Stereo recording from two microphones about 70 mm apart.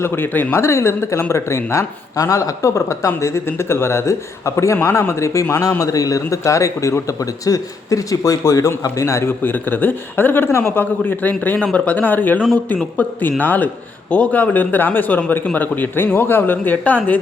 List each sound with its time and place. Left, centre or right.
0.0 s a man's voice: left
9.4 s speech: left